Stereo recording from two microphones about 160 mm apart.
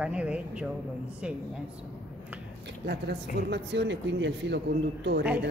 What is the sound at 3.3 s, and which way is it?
Speech, 90° right.